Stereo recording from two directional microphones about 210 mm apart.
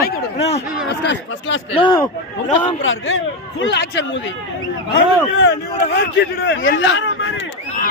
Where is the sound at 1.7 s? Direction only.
20° left (ahead or behind).